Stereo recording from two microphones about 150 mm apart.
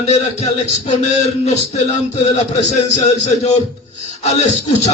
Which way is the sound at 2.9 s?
50° left (ahead or behind).